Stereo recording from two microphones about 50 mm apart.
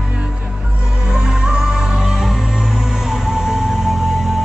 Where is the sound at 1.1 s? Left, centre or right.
Centre.